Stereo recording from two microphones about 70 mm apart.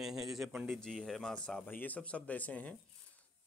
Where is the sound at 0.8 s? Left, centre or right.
Centre.